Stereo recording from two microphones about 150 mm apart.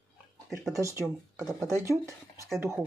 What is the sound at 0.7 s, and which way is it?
Speech, 20° right (ahead or behind).